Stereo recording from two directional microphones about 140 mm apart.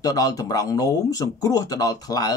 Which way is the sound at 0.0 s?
25° left (ahead or behind).